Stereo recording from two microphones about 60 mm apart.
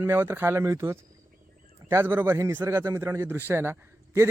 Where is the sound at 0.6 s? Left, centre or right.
Right.